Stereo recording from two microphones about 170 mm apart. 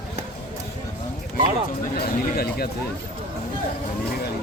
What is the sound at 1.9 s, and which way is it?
Speech, 65° left (ahead or behind).